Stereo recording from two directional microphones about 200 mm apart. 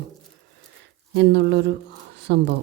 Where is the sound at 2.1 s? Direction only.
60° right (ahead or behind).